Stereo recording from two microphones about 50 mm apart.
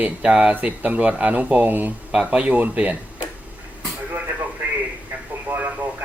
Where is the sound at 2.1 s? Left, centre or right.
Centre.